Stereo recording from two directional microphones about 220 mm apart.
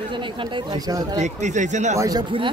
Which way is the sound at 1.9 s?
15° right (ahead or behind).